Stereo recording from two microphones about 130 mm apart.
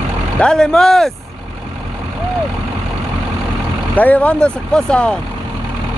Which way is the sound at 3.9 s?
10° left (ahead or behind).